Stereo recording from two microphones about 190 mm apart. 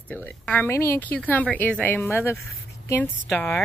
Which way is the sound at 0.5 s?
10° left (ahead or behind).